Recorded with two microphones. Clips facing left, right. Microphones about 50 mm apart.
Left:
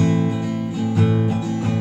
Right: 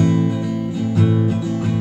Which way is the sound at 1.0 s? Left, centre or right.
Centre.